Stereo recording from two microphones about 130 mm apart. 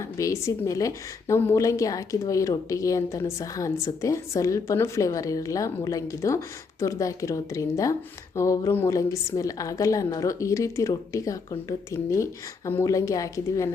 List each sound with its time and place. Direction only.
0.0 s a woman's voice: 25° left (ahead or behind)